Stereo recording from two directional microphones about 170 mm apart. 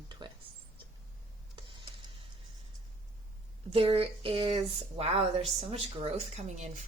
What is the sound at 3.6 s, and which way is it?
Speech, 35° right (ahead or behind).